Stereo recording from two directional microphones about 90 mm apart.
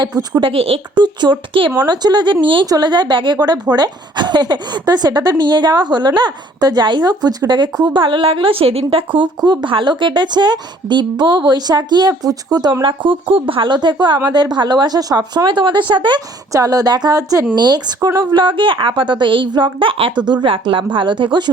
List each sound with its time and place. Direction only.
0.4 s speech: 90° right
1.0 s a woman's voice: 55° right (ahead or behind)
1.9 s a woman's voice: 50° right (ahead or behind)
2.6 s a woman's voice: 50° right (ahead or behind); by 9.3 s 80° right
9.4 s a woman's voice: 50° right (ahead or behind)
12.8 s a woman's voice: 65° right (ahead or behind); by 15.4 s 45° right (ahead or behind)
15.4 s a woman's voice: 60° right (ahead or behind)
16.5 s a woman's voice: 40° right (ahead or behind); by 20.1 s 80° right
20.2 s a woman's voice: 65° right (ahead or behind)